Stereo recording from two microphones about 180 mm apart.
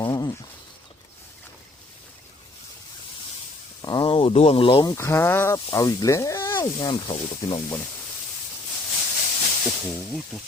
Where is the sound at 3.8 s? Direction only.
25° left (ahead or behind).